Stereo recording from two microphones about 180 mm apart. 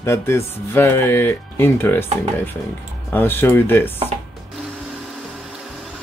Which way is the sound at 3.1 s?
10° left (ahead or behind).